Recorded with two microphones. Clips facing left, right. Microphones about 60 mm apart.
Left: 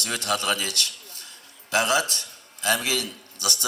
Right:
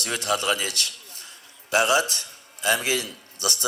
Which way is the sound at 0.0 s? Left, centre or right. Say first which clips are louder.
Right 1 dB; right.